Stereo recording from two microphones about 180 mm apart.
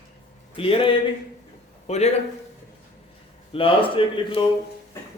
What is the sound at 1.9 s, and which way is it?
Speech, 35° left (ahead or behind).